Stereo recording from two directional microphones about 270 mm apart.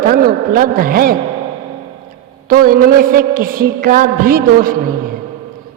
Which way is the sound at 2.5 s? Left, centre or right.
Right.